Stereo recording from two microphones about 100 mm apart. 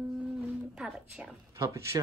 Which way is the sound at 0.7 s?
5° right (ahead or behind).